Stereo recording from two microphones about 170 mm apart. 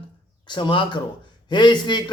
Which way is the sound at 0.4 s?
25° left (ahead or behind).